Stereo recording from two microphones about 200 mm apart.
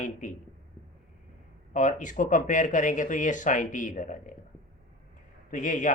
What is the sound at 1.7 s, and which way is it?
Speech, 40° left (ahead or behind).